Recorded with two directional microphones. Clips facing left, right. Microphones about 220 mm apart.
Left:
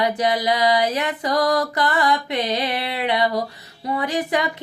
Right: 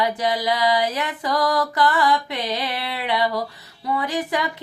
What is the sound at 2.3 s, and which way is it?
Music, 20° left (ahead or behind).